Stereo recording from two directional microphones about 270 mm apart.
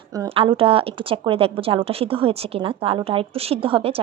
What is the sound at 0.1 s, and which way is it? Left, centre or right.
Speech, centre.